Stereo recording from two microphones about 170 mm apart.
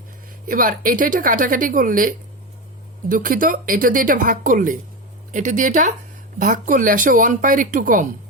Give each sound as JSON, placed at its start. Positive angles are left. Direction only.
{"t": 0.4, "sound": "a woman's voice", "side_deg": -55}